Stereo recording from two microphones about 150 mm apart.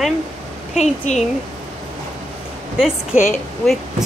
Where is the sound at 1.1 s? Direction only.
55° left (ahead or behind).